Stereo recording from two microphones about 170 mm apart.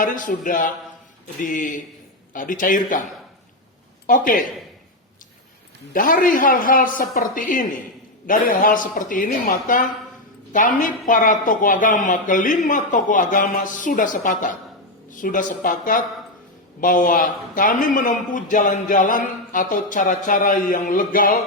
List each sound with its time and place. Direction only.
0.0 s a man's voice: 50° left (ahead or behind)
5.9 s a man's voice: 55° left (ahead or behind)